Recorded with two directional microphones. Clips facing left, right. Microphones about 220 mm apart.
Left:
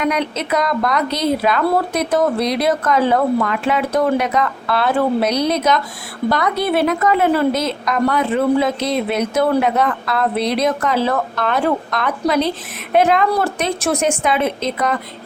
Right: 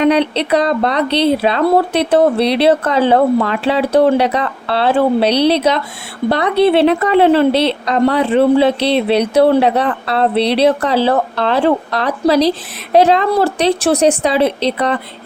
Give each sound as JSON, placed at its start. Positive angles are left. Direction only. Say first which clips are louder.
{"t": 0.0, "sound": "a woman's voice", "louder": "right 7 dB", "side_deg": -30}